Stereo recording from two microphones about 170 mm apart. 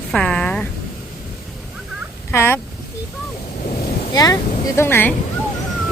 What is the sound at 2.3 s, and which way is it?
Speech, 15° left (ahead or behind).